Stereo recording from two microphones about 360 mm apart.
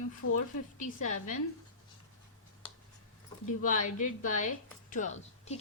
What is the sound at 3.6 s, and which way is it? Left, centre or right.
A woman's voice, left.